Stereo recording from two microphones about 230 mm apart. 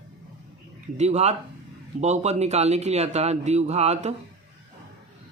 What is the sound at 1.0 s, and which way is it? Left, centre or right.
Speech, right.